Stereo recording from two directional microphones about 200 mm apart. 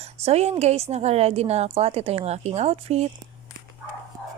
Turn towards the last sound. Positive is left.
turn(degrees=-30)  # may be behind; listen again after turning